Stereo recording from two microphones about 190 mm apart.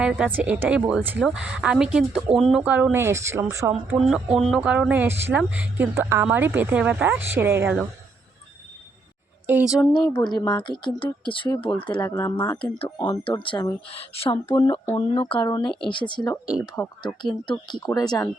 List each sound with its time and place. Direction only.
0.0 s speech: 5° right (ahead or behind)
3.8 s speech: 5° right (ahead or behind)
9.5 s speech: 10° right (ahead or behind)
9.7 s speech: 20° left (ahead or behind)
16.6 s speech: 15° left (ahead or behind)
17.4 s speech: 25° left (ahead or behind)